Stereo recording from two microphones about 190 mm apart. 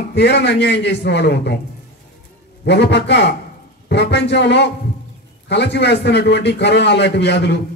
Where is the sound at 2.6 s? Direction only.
65° left (ahead or behind).